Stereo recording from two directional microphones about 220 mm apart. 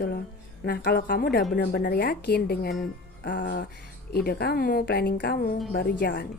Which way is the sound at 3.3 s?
40° left (ahead or behind).